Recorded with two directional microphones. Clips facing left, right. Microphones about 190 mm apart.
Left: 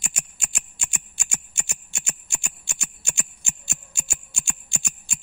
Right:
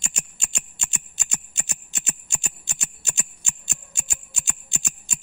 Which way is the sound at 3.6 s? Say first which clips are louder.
Left 1 dB; 20° right (ahead or behind).